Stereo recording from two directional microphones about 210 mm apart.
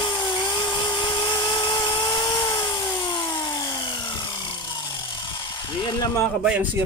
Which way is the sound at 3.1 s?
20° left (ahead or behind).